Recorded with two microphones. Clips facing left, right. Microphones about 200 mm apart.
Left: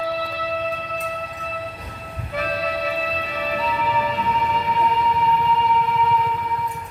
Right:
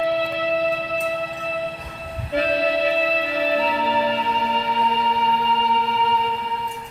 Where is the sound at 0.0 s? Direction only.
25° right (ahead or behind).